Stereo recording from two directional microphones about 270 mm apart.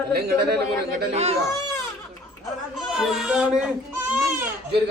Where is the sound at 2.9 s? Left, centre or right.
Centre.